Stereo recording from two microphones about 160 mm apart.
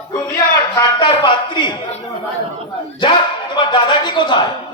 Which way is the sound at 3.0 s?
30° left (ahead or behind).